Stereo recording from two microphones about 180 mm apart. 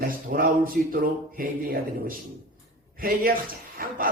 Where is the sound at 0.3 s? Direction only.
50° right (ahead or behind).